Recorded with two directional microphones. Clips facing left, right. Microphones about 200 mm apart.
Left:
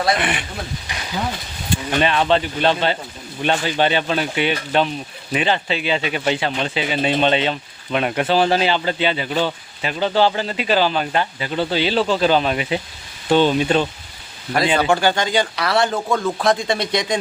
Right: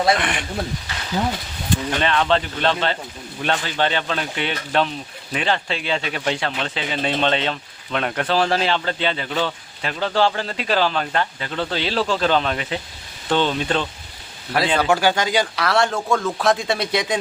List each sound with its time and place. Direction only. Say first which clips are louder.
0.2 s speech: even; 5° left (ahead or behind)
14.8 s speech: left 1 dB; 5° right (ahead or behind)